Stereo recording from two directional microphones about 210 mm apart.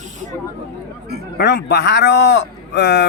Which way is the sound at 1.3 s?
55° left (ahead or behind).